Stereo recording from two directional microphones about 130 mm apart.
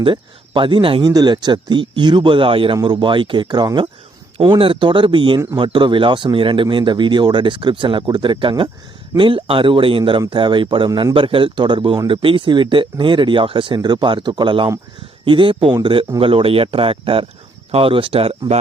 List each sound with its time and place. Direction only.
0.0 s speech: 40° right (ahead or behind)